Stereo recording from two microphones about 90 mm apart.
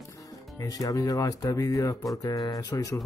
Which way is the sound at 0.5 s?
40° left (ahead or behind).